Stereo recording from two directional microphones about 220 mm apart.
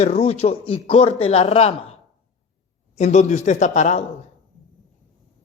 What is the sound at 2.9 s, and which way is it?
A man's voice, 30° left (ahead or behind).